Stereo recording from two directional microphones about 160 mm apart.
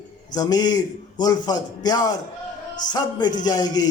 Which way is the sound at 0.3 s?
25° left (ahead or behind).